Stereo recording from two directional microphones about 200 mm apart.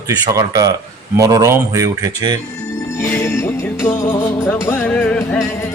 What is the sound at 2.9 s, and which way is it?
Music, 15° left (ahead or behind).